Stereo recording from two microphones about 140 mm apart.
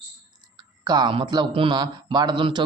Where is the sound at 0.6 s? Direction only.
30° right (ahead or behind).